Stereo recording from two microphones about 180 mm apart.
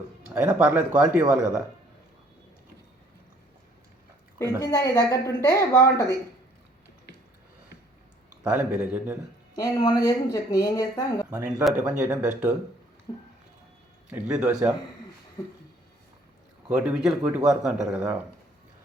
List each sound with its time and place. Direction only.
0.3 s speech: 10° right (ahead or behind)
4.6 s speech: 15° left (ahead or behind)
8.4 s speech: 10° right (ahead or behind)
9.6 s speech: 20° left (ahead or behind)
11.3 s speech: 15° right (ahead or behind)
13.1 s speech: 20° left (ahead or behind)
14.1 s speech: 5° right (ahead or behind)
16.6 s speech: 5° right (ahead or behind)